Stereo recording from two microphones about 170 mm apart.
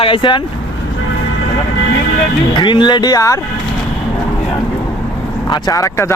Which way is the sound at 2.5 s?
25° left (ahead or behind).